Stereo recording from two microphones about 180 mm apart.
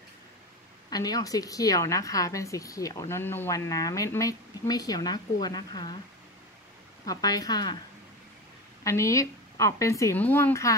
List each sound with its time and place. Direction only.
0.8 s a woman's voice: 20° left (ahead or behind)
7.1 s a woman's voice: 20° left (ahead or behind)
8.8 s a woman's voice: 15° left (ahead or behind)